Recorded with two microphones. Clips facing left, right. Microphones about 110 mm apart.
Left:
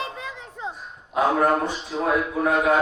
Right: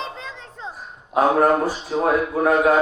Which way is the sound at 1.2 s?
40° right (ahead or behind).